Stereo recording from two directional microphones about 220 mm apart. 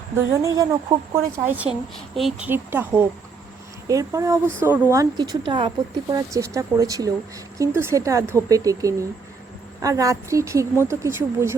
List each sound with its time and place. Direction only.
0.4 s speech: 15° right (ahead or behind)